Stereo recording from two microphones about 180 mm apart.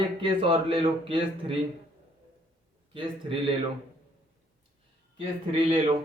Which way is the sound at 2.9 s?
30° right (ahead or behind).